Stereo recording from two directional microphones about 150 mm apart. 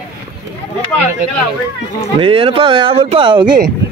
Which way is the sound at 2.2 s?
40° right (ahead or behind).